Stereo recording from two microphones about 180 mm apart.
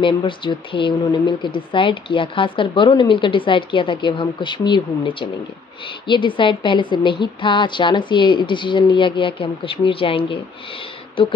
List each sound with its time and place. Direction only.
0.0 s speech: 25° left (ahead or behind)